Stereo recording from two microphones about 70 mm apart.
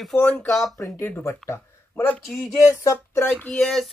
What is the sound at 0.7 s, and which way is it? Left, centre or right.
Speech, left.